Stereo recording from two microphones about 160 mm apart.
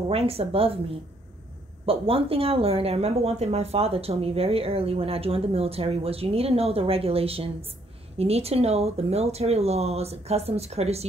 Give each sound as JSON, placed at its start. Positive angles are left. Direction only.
{"t": 0.1, "sound": "speech", "side_deg": -35}
{"t": 1.9, "sound": "speech", "side_deg": -35}